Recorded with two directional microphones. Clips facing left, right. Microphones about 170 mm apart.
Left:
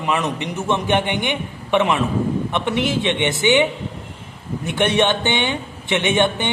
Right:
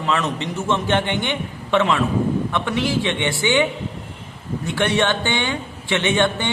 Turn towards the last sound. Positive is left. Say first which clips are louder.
# left 1 dB
turn(degrees=20)  # may be behind; listen again after turning